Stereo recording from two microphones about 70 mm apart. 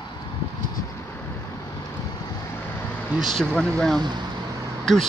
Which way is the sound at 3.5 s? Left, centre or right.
Centre.